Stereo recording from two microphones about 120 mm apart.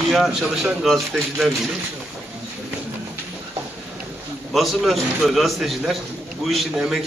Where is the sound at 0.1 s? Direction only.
Centre (ahead or behind).